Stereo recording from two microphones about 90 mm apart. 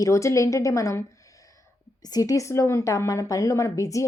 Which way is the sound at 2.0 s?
45° left (ahead or behind).